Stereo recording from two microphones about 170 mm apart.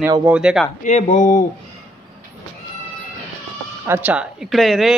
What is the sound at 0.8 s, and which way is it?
Speech, 45° left (ahead or behind).